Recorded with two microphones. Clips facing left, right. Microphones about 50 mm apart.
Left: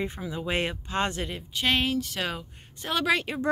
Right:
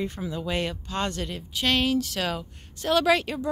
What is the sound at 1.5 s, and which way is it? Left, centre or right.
Speech, centre.